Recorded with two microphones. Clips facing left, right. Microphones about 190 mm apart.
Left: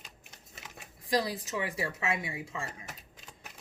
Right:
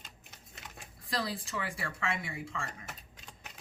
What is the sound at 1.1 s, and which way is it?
A woman's voice, 15° left (ahead or behind).